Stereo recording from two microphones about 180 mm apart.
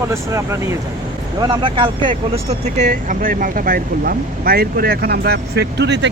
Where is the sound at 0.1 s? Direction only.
15° right (ahead or behind).